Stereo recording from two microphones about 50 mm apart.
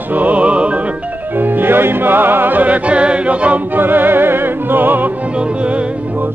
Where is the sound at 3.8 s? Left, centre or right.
Right.